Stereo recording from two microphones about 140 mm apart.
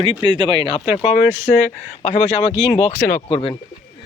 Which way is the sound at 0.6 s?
40° left (ahead or behind).